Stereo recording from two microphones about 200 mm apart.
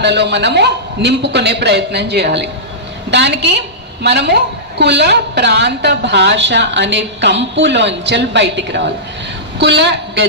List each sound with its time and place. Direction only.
0.0 s a woman's voice: 60° right (ahead or behind)